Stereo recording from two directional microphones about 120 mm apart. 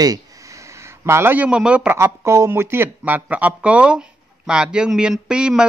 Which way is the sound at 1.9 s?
20° right (ahead or behind).